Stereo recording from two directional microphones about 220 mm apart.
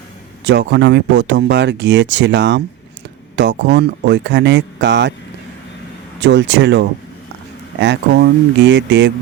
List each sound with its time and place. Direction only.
0.4 s speech: 50° right (ahead or behind)
6.1 s speech: 55° right (ahead or behind)